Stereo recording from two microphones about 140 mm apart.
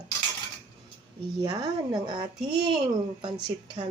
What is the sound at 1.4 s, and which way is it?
Speech, 30° right (ahead or behind).